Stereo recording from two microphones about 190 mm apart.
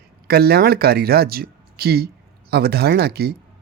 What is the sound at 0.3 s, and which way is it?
Speech, 55° right (ahead or behind).